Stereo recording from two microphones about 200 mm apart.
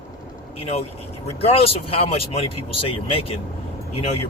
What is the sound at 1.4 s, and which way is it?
Speech, 30° left (ahead or behind).